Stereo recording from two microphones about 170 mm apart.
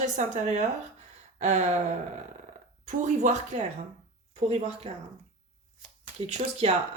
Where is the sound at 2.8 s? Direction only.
45° right (ahead or behind).